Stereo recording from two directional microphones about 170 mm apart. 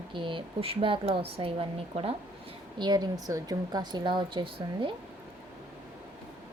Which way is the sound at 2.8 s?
25° right (ahead or behind).